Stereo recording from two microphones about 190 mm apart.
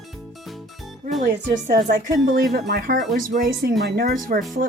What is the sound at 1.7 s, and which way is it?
Speech, 55° right (ahead or behind).